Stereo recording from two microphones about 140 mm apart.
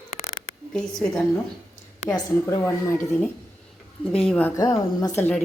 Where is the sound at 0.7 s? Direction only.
5° left (ahead or behind).